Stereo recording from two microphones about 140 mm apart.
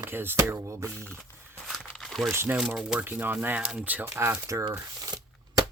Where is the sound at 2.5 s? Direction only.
5° right (ahead or behind); by 4.7 s 20° right (ahead or behind).